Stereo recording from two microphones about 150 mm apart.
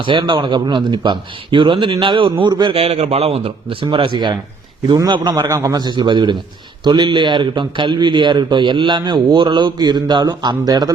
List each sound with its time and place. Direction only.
0.0 s a man's voice: 30° right (ahead or behind)